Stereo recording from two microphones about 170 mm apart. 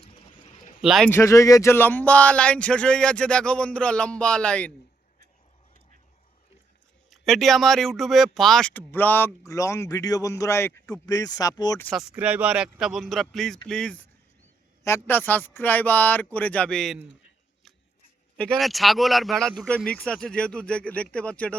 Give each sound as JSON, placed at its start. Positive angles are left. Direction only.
{"t": 0.0, "sound": "a sound", "side_deg": 45}
{"t": 0.8, "sound": "speech", "side_deg": 0}
{"t": 1.1, "sound": "speech", "side_deg": 15}
{"t": 7.1, "sound": "speech", "side_deg": 0}
{"t": 11.9, "sound": "speech", "side_deg": -5}
{"t": 18.3, "sound": "speech", "side_deg": 0}